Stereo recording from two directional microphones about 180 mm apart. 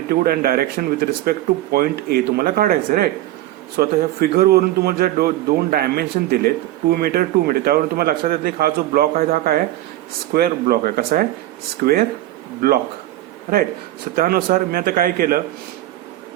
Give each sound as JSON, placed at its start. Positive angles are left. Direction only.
{"t": 0.1, "sound": "speech", "side_deg": -55}
{"t": 14.2, "sound": "speech", "side_deg": -55}